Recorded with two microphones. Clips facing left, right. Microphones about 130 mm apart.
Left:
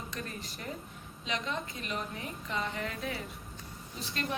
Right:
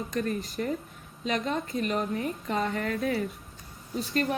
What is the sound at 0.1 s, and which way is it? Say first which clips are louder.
A woman's voice: right 11 dB; 45° right (ahead or behind).